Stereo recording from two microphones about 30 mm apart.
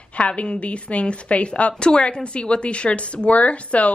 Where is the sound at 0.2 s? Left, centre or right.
Left.